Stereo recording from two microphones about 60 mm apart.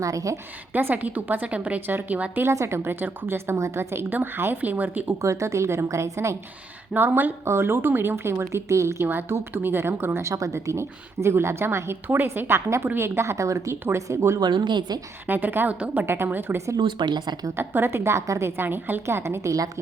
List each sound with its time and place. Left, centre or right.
0.0 s a woman's voice: right
0.7 s a woman's voice: right
2.5 s a woman's voice: right
5.2 s a woman's voice: right
6.9 s a woman's voice: right
7.4 s a woman's voice: right
9.0 s a woman's voice: right
13.3 s a woman's voice: right
13.8 s a woman's voice: right
15.3 s a woman's voice: right
17.6 s a woman's voice: right
18.5 s a woman's voice: right
19.0 s a woman's voice: right